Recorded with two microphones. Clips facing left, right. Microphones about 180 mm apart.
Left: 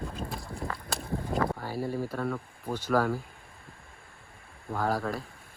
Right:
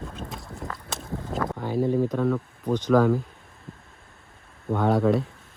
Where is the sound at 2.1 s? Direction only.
10° left (ahead or behind).